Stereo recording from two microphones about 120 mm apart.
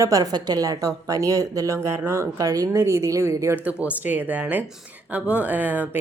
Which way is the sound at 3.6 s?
15° right (ahead or behind).